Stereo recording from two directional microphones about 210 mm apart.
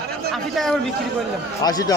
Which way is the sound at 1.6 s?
20° left (ahead or behind).